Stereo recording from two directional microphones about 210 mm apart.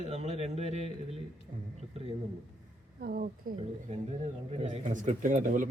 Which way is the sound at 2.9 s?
45° right (ahead or behind).